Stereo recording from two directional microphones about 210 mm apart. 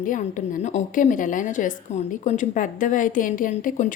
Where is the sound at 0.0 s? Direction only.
40° left (ahead or behind).